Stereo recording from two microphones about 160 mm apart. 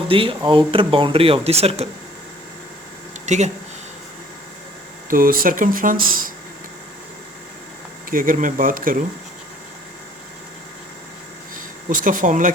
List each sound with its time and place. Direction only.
0.1 s speech: 35° right (ahead or behind)
3.2 s speech: 45° right (ahead or behind)
5.0 s speech: 60° right (ahead or behind)
8.1 s speech: 60° right (ahead or behind)
11.5 s speech: 60° right (ahead or behind)